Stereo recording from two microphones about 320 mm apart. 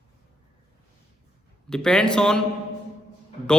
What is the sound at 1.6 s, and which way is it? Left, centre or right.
Speech, centre.